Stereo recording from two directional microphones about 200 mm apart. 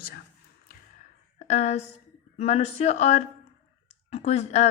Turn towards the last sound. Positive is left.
turn(degrees=30)  # may be behind; listen again after turning